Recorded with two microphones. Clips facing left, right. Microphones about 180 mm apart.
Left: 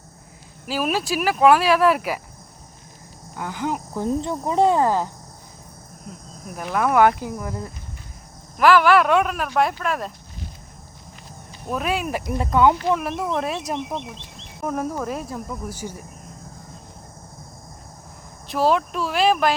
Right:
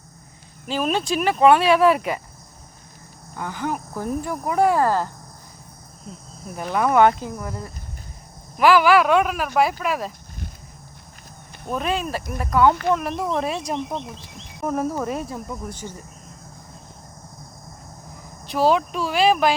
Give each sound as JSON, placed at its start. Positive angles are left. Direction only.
{"t": 0.7, "sound": "speech", "side_deg": 5}
{"t": 3.3, "sound": "speech", "side_deg": 15}
{"t": 6.6, "sound": "speech", "side_deg": 0}
{"t": 7.3, "sound": "speech", "side_deg": 15}
{"t": 8.5, "sound": "speech", "side_deg": 0}
{"t": 11.7, "sound": "speech", "side_deg": 5}
{"t": 12.9, "sound": "speech", "side_deg": 0}
{"t": 18.4, "sound": "speech", "side_deg": 0}